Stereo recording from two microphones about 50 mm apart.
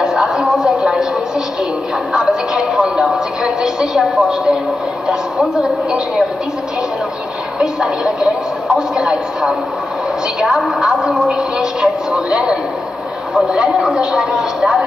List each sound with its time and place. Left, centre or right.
0.0 s a sound: centre
2.1 s music: centre
5.0 s a sound: centre
7.5 s a woman's voice: centre
10.8 s a woman's voice: centre
13.7 s a woman's voice: centre